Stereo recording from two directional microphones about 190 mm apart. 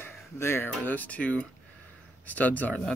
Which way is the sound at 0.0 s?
10° left (ahead or behind).